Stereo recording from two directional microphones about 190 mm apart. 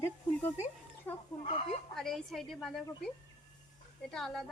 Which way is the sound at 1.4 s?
35° left (ahead or behind).